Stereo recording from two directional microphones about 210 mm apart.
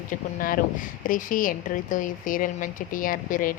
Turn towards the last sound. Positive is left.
turn(degrees=40)  # may be behind; listen again after turning